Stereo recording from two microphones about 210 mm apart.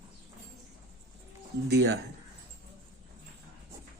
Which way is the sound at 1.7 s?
50° right (ahead or behind).